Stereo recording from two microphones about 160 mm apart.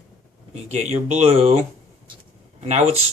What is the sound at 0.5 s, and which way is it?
Speech, 45° right (ahead or behind).